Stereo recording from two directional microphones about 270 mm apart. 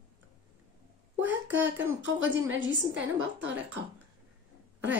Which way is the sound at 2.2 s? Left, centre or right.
Right.